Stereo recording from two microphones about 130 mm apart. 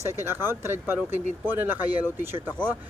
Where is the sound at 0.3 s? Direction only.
20° right (ahead or behind).